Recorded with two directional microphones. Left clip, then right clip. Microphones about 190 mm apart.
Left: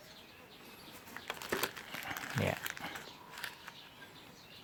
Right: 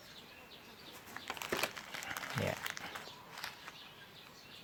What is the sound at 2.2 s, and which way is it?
Applause, 5° right (ahead or behind).